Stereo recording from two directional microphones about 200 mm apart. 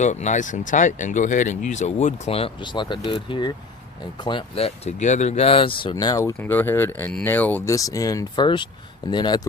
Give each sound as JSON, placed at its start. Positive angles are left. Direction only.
{"t": 0.0, "sound": "speech", "side_deg": 35}